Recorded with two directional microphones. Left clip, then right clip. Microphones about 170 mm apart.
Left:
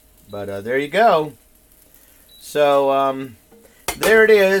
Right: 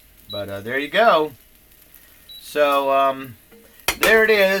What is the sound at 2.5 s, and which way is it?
Speech, 70° left (ahead or behind).